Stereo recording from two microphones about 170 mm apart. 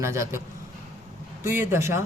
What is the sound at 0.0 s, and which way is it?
Speech, 15° right (ahead or behind).